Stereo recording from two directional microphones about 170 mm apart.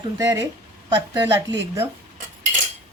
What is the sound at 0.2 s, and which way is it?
Speech, 20° right (ahead or behind).